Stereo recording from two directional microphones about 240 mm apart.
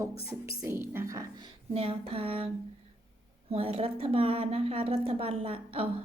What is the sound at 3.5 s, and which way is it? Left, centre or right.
A woman's voice, right.